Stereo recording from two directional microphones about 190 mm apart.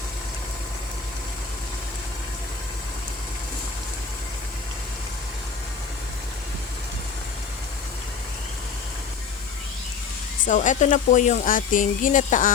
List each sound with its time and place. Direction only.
10.4 s speech: 40° left (ahead or behind)